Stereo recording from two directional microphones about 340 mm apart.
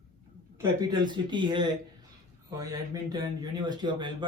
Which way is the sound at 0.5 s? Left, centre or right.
Centre.